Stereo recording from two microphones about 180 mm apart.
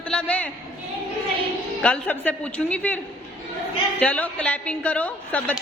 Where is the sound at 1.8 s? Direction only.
10° left (ahead or behind).